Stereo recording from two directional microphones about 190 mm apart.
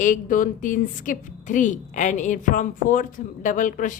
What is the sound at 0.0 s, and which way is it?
A woman's voice, 45° left (ahead or behind).